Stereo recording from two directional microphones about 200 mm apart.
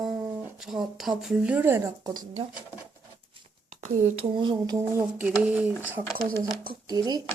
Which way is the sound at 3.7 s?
35° right (ahead or behind).